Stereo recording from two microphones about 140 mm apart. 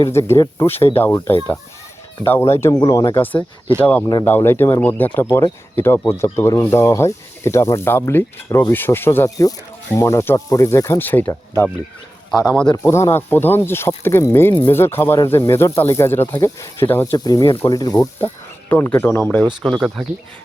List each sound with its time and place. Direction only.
0.0 s speech: 20° left (ahead or behind)
2.2 s speech: 20° left (ahead or behind)
2.8 s speech: 30° left (ahead or behind)
3.8 s speech: 10° left (ahead or behind)
18.7 s speech: 15° left (ahead or behind)